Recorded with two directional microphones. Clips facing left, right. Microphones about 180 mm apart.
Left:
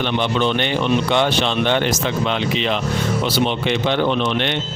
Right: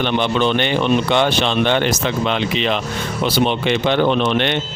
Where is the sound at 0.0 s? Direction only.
70° right (ahead or behind).